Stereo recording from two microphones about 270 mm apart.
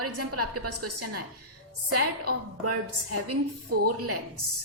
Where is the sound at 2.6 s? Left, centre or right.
Right.